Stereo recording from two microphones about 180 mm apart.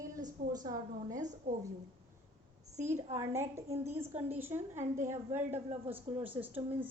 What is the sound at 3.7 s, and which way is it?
Speech, 35° right (ahead or behind).